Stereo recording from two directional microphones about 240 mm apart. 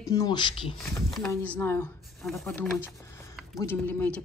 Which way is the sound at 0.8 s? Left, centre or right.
Centre.